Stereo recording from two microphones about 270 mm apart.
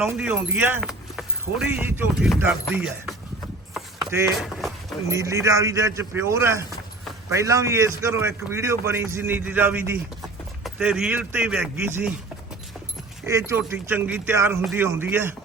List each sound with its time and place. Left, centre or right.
0.0 s speech: centre
3.9 s a sound: centre
5.1 s a man's voice: centre
13.2 s a man's voice: centre